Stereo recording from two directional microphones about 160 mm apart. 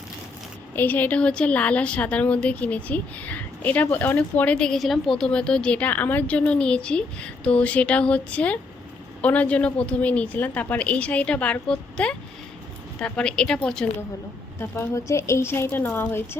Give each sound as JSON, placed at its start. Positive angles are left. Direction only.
{"t": 0.8, "sound": "a woman's voice", "side_deg": 10}
{"t": 14.6, "sound": "a woman's voice", "side_deg": 15}